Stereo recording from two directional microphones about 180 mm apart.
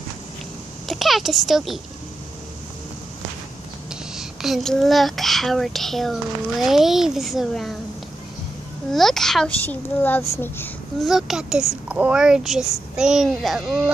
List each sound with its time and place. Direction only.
0.8 s a child's voice: centre (ahead or behind)
3.9 s a child's voice: 5° right (ahead or behind)
8.9 s a child's voice: centre (ahead or behind)
11.1 s a child's voice: centre (ahead or behind)